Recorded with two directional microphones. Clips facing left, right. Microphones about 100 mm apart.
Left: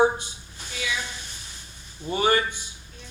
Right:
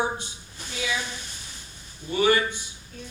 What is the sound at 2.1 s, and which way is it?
Speech, 45° left (ahead or behind).